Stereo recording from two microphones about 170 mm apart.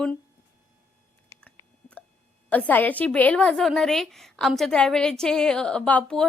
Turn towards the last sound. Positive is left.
turn(degrees=5)  # may be behind; listen again after turning